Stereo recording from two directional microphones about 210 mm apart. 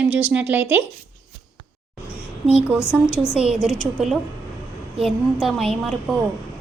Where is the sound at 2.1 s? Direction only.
30° left (ahead or behind).